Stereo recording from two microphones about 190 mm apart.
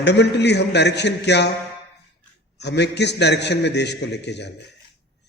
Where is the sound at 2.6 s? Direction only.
65° left (ahead or behind).